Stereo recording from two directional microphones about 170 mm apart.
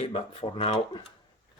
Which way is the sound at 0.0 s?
35° left (ahead or behind).